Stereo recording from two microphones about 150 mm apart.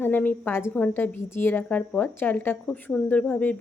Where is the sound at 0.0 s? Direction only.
15° left (ahead or behind).